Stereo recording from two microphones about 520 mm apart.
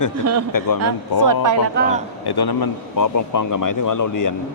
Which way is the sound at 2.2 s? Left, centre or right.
Left.